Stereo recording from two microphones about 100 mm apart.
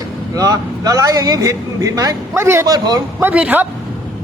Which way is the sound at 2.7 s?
40° right (ahead or behind).